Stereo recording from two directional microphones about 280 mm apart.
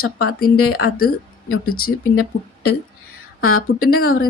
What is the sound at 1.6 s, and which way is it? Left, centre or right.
Speech, left.